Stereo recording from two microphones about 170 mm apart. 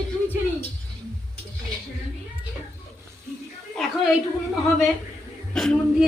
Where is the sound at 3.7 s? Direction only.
Centre (ahead or behind).